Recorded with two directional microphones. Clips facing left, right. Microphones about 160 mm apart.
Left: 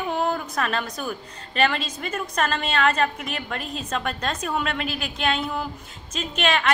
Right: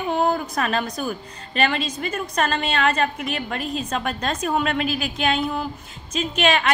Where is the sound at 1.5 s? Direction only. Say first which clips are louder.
Right 1 dB; 5° right (ahead or behind).